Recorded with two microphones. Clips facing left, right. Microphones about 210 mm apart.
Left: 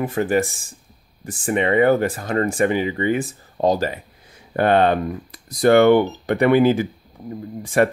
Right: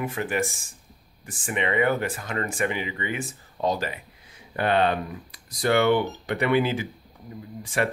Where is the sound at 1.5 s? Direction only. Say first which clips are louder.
Left 8 dB; 40° left (ahead or behind).